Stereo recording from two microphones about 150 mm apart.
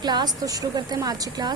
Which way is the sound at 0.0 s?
30° right (ahead or behind).